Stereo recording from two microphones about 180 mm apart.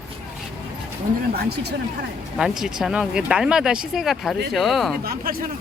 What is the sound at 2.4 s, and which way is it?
Speech, 5° right (ahead or behind).